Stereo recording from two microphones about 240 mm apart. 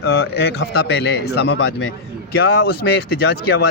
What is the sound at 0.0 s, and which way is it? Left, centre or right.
A man's voice, left.